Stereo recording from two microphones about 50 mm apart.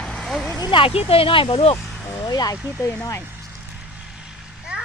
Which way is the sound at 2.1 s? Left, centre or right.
Left.